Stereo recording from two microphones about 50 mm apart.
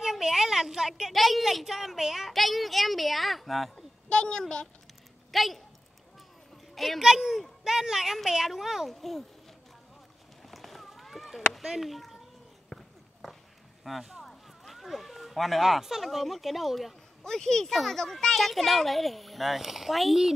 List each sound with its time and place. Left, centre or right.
0.0 s a sound: centre
1.1 s speech: centre
4.1 s a woman's voice: centre
5.3 s speech: centre
6.7 s a sound: centre
7.0 s a woman's voice: centre
10.4 s a sound: centre
11.6 s speech: centre
12.6 s walk: centre
13.8 s speech: centre
17.2 s speech: centre